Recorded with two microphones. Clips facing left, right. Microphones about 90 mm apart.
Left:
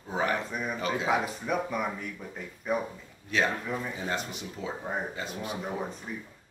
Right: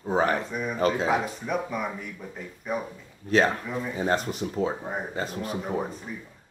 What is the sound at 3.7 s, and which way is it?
Speech, centre (ahead or behind).